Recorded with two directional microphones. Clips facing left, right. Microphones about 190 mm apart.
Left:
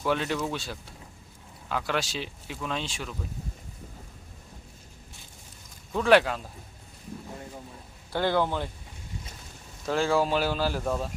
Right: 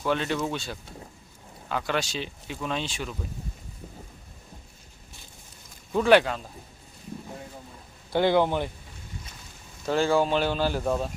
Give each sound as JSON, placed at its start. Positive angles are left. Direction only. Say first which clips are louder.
{"t": 0.0, "sound": "speech", "louder": "right 1 dB", "side_deg": 5}
{"t": 5.9, "sound": "speech", "louder": "right 1 dB", "side_deg": -5}
{"t": 8.1, "sound": "speech", "louder": "right 4 dB", "side_deg": -15}
{"t": 9.8, "sound": "speech", "louder": "right 2 dB", "side_deg": 0}